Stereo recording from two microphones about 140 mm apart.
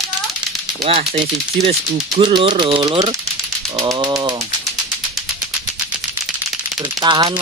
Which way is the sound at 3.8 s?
30° right (ahead or behind).